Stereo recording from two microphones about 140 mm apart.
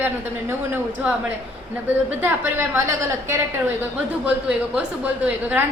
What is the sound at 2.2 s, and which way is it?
A woman's voice, 15° right (ahead or behind).